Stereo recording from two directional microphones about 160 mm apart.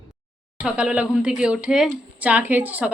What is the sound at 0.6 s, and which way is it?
A woman's voice, 5° right (ahead or behind).